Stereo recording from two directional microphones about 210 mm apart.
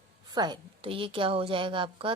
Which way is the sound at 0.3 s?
20° right (ahead or behind).